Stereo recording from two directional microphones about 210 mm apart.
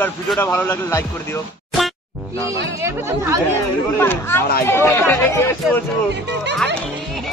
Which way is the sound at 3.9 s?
10° left (ahead or behind).